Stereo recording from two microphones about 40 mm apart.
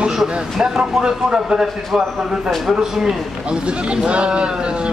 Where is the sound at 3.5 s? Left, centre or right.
Right.